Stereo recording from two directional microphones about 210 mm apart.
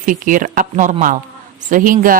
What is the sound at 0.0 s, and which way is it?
A woman's voice, 40° right (ahead or behind).